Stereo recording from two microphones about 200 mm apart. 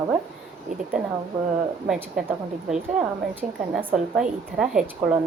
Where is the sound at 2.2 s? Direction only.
Centre (ahead or behind).